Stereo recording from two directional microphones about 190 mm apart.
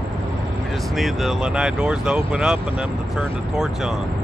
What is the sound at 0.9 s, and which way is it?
Speech, centre (ahead or behind).